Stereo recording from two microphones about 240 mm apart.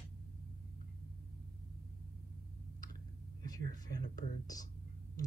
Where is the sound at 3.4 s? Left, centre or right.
Centre.